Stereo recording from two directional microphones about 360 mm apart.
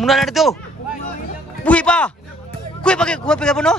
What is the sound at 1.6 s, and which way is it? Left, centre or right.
Music, centre.